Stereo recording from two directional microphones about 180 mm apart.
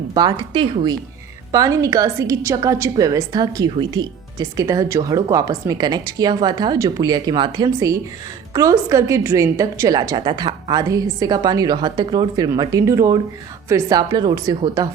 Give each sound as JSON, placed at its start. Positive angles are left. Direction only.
{"t": 0.1, "sound": "a woman's voice", "side_deg": -25}